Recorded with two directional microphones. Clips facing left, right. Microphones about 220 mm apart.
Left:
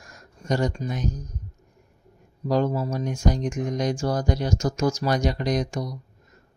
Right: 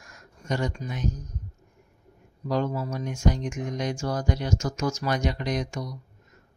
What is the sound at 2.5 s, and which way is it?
Speech, 35° left (ahead or behind).